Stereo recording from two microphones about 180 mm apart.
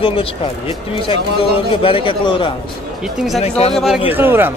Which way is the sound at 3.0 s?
5° right (ahead or behind).